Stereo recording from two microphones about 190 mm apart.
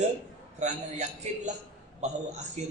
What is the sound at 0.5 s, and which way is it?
A man's voice, 35° right (ahead or behind).